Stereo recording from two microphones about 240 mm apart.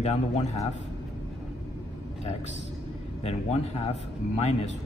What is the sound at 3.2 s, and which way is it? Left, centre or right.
A man's voice, left.